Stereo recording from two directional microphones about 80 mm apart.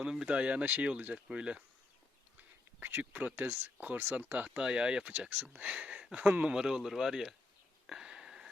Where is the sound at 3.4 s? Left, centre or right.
Right; by 7.3 s centre.